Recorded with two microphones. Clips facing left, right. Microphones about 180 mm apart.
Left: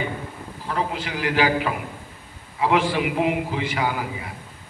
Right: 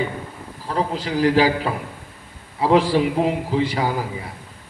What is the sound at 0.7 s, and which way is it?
A man's voice, 35° right (ahead or behind).